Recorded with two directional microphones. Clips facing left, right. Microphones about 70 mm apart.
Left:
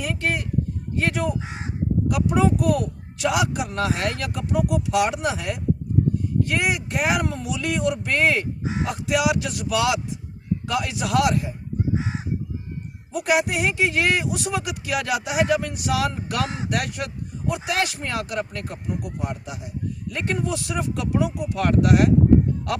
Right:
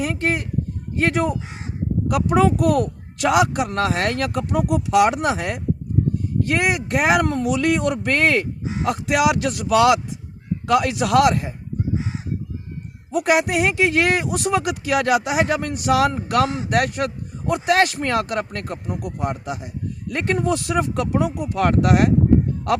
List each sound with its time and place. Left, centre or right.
0.0 s speech: right
2.0 s speech: right
13.1 s speech: right